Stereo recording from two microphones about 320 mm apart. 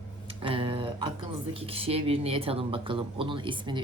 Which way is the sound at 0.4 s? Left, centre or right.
Centre.